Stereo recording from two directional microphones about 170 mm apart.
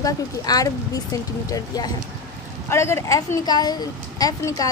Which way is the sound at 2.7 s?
15° left (ahead or behind).